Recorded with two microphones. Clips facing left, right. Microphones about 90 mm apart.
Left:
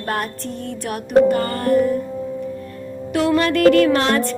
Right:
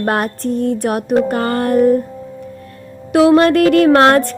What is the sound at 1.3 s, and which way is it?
Speech, 55° right (ahead or behind).